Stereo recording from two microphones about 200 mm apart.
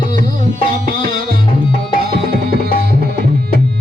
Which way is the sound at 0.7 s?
45° right (ahead or behind).